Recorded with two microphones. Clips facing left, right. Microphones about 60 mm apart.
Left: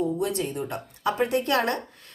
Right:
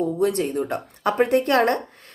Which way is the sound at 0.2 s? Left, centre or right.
Right.